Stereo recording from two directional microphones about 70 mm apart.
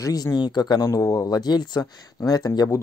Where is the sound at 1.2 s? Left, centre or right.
Left.